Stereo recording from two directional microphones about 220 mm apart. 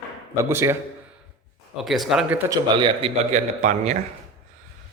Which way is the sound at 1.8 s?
Centre (ahead or behind).